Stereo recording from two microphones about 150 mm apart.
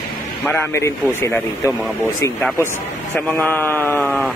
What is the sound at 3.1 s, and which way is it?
Speech, 10° left (ahead or behind).